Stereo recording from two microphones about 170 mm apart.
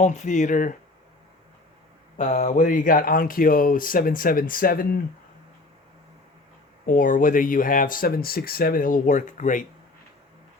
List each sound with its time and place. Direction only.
0.0 s speech: 45° left (ahead or behind)
2.1 s speech: 45° left (ahead or behind); by 4.9 s 60° left (ahead or behind)
6.8 s speech: 50° left (ahead or behind)